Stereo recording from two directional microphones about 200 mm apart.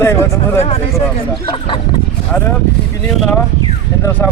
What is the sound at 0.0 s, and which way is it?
Speech, 10° left (ahead or behind).